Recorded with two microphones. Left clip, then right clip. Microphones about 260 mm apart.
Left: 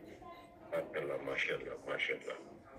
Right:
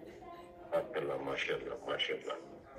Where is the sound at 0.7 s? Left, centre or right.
Centre.